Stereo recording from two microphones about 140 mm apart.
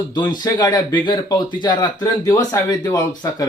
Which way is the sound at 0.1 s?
30° left (ahead or behind).